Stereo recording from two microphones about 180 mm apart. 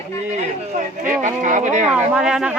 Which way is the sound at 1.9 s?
5° right (ahead or behind).